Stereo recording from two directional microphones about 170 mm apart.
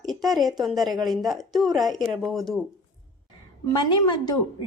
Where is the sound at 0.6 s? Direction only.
Centre (ahead or behind).